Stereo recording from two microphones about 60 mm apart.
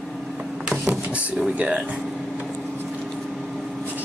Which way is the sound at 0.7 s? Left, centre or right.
Centre.